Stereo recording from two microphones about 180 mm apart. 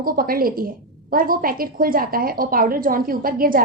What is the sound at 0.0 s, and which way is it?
A woman's voice, 55° right (ahead or behind).